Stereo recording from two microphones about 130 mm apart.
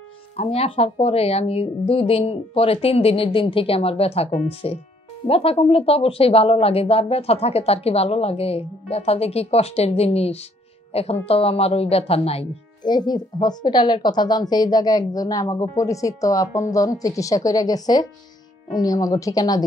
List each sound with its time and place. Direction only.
0.4 s speech: 50° left (ahead or behind)
12.8 s a woman's voice: 35° left (ahead or behind)